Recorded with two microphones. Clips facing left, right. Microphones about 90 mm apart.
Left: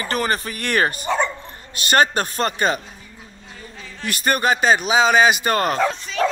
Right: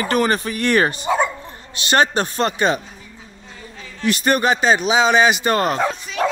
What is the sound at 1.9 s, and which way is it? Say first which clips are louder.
Speech: right 1 dB; 20° right (ahead or behind).